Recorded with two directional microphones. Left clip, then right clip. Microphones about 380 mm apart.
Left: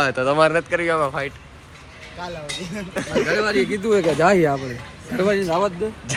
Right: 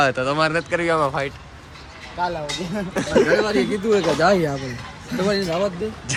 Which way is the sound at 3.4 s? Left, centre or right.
Centre.